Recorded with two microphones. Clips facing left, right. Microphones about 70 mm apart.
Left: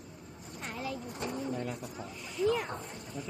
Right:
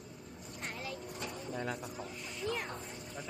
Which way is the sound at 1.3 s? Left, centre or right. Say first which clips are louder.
Left 4 dB; centre.